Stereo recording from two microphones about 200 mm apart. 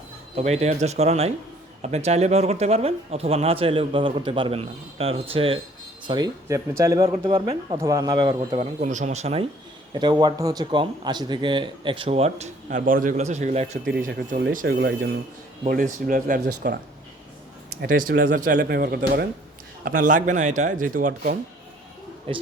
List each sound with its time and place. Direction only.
0.3 s a man's voice: 35° right (ahead or behind)
12.6 s a man's voice: 45° right (ahead or behind)
14.1 s speech: 50° right (ahead or behind)
15.6 s a man's voice: 40° right (ahead or behind)
17.8 s speech: 45° right (ahead or behind)
18.5 s speech: 55° right (ahead or behind)
19.8 s a man's voice: 45° right (ahead or behind)
22.3 s a man's voice: 30° right (ahead or behind)